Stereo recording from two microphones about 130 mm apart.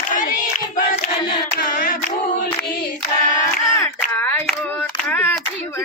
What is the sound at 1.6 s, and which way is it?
Hands, 90° left.